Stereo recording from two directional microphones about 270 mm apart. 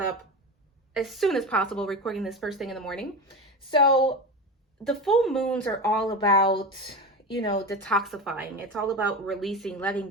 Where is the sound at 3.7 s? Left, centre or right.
Centre.